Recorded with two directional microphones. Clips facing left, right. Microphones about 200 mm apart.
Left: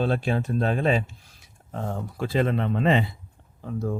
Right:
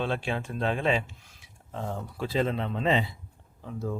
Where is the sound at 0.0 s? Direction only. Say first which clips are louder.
Left 5 dB; 40° left (ahead or behind).